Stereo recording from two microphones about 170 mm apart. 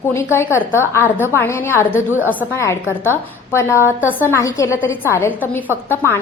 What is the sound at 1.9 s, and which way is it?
Speech, 10° right (ahead or behind).